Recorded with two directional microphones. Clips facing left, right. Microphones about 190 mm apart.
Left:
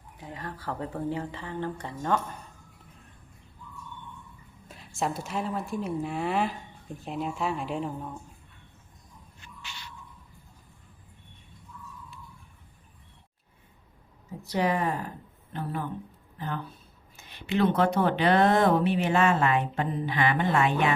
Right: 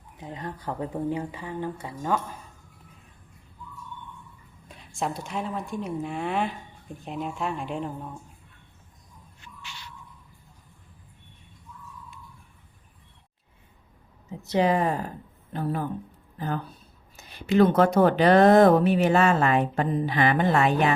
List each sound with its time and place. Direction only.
0.2 s speech: 20° right (ahead or behind)
4.7 s a woman's voice: centre (ahead or behind)
14.3 s speech: 20° right (ahead or behind); by 15.9 s 40° right (ahead or behind)
17.2 s speech: 40° right (ahead or behind)